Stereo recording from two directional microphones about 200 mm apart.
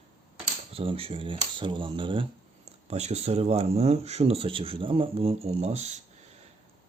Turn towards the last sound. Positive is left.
turn(degrees=-35)  # may be behind; listen again after turning